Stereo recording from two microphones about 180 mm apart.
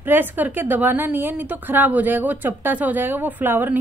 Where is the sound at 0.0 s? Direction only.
10° right (ahead or behind).